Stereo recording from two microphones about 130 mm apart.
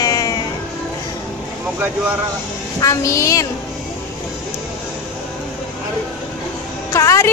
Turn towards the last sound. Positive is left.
turn(degrees=25)  # may be behind; listen again after turning